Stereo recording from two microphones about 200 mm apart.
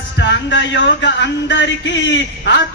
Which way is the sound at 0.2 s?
65° left (ahead or behind).